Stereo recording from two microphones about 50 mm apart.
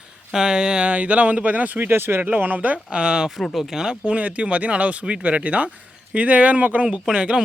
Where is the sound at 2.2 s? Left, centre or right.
Right.